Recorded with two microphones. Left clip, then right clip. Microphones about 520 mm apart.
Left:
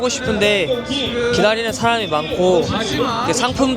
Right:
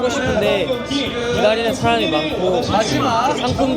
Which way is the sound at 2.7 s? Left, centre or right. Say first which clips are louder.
Right 3 dB; centre.